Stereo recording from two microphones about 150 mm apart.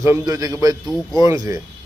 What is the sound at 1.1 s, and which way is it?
Speech, 25° right (ahead or behind).